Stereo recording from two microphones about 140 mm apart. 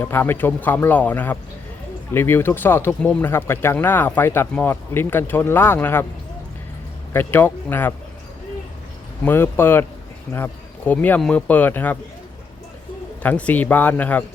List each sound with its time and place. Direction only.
0.0 s speech: 15° left (ahead or behind)
7.1 s speech: 15° left (ahead or behind)
9.2 s speech: 15° left (ahead or behind)
13.2 s speech: 10° left (ahead or behind)